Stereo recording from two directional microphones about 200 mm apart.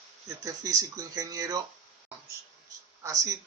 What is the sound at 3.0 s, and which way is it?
Speech, 15° right (ahead or behind).